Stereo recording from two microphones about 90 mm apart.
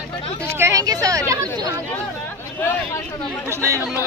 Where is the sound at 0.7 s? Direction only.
40° right (ahead or behind).